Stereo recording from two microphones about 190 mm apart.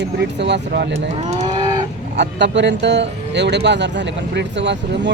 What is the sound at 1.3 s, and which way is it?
Livestock, 35° right (ahead or behind).